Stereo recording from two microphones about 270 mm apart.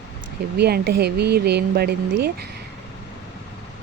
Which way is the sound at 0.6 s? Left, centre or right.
Right.